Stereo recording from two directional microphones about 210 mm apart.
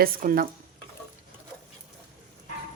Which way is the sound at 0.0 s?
45° right (ahead or behind).